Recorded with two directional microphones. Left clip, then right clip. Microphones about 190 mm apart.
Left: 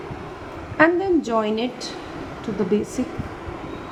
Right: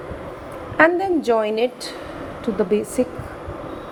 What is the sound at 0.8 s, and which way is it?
Speech, 35° right (ahead or behind).